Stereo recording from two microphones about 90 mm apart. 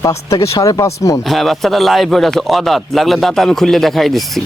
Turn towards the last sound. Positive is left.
turn(degrees=0)  # may be behind; listen again after turning